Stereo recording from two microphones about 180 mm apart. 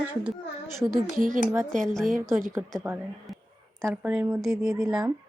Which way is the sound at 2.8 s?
10° right (ahead or behind).